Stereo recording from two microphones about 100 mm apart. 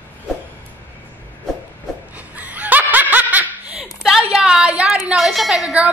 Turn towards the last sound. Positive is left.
turn(degrees=0)  # may be behind; listen again after turning